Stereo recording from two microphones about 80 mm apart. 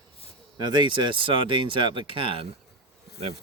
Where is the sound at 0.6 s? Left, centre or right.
Right.